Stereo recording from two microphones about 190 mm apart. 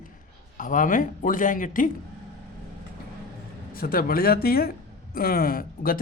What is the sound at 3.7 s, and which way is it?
Speech, 50° left (ahead or behind).